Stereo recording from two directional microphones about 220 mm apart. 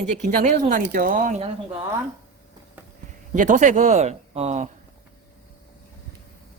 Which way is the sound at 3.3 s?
35° right (ahead or behind).